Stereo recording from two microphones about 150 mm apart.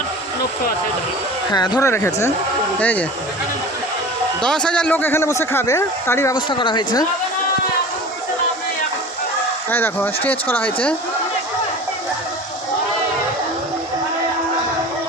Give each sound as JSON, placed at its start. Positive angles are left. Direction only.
{"t": 1.5, "sound": "speech", "side_deg": 30}
{"t": 4.4, "sound": "speech", "side_deg": 5}
{"t": 6.3, "sound": "speech", "side_deg": 35}
{"t": 9.6, "sound": "speech", "side_deg": 15}